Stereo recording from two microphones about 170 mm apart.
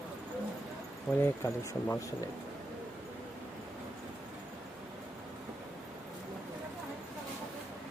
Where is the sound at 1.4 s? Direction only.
15° left (ahead or behind).